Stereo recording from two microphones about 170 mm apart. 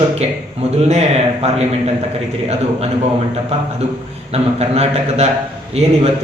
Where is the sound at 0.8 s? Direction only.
40° right (ahead or behind).